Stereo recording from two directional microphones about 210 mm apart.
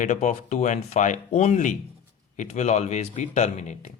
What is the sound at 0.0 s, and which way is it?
Speech, 35° left (ahead or behind).